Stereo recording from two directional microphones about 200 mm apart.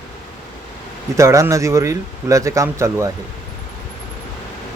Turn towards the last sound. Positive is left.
turn(degrees=-15)  # may be behind; listen again after turning